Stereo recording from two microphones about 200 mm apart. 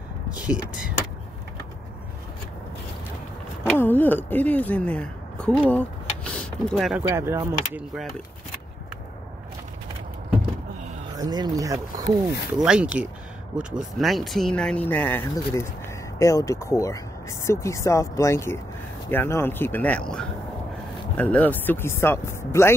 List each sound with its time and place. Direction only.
0.3 s speech: 5° right (ahead or behind)
3.7 s speech: 10° left (ahead or behind)
7.1 s speech: 15° right (ahead or behind)
11.1 s speech: 20° right (ahead or behind)
12.5 s speech: 5° right (ahead or behind); by 22.8 s 15° left (ahead or behind)